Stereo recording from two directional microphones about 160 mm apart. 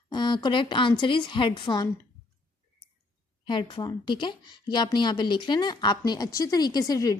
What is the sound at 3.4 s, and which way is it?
A woman's voice, 30° left (ahead or behind).